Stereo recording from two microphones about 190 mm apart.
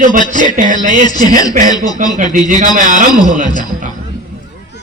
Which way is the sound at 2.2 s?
40° right (ahead or behind).